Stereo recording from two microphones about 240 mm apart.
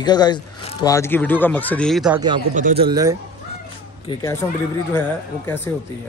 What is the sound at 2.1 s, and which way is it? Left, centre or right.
Speech, centre.